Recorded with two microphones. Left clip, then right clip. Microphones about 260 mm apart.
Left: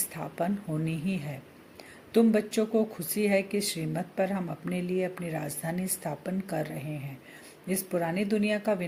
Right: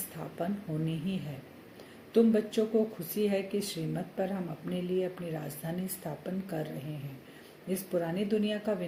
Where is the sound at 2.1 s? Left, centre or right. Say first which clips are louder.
Left 2 dB; left.